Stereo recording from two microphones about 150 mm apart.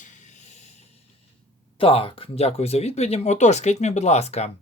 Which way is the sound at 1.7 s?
40° left (ahead or behind).